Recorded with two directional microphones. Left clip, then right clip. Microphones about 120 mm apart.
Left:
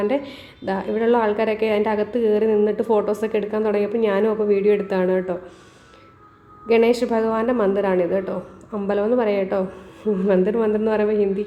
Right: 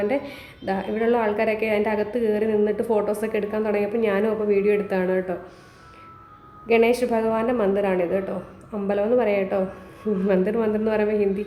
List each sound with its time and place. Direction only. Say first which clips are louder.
0.0 s a woman's voice: left 2 dB; 20° left (ahead or behind)
6.7 s a woman's voice: left 2 dB; 20° left (ahead or behind)